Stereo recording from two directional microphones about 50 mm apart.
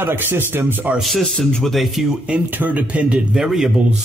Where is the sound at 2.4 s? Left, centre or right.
Right.